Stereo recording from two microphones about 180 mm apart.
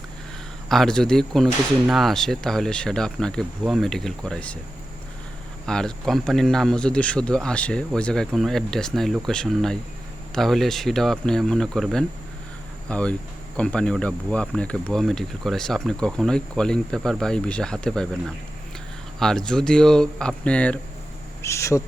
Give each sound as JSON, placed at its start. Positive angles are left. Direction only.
{"t": 0.7, "sound": "speech", "side_deg": 0}
{"t": 5.6, "sound": "speech", "side_deg": 5}
{"t": 19.2, "sound": "speech", "side_deg": 5}